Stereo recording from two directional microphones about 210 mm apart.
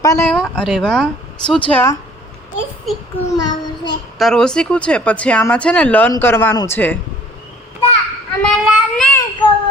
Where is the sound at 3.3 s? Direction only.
20° left (ahead or behind).